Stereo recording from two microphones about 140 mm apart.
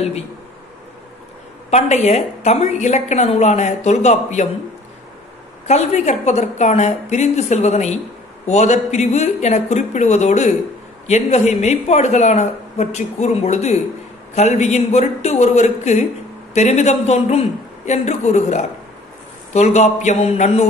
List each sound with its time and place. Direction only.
1.7 s a woman's voice: 55° left (ahead or behind)
5.7 s a woman's voice: 55° left (ahead or behind)